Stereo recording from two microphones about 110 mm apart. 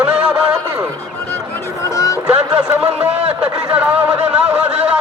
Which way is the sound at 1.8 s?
30° left (ahead or behind).